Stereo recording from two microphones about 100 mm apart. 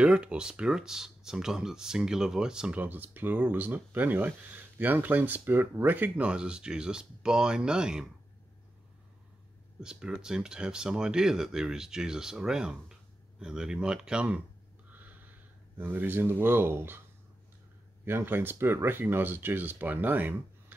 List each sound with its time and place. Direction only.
0.0 s speech: 10° right (ahead or behind)
9.8 s speech: 10° right (ahead or behind)
15.8 s speech: 20° right (ahead or behind)
18.0 s speech: 20° right (ahead or behind)